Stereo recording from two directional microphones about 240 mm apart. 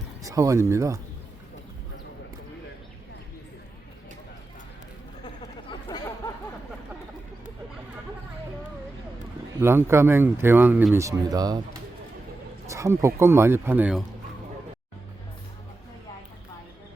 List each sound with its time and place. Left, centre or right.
0.2 s speech: centre
5.9 s a sound: centre
9.6 s speech: centre
12.6 s speech: centre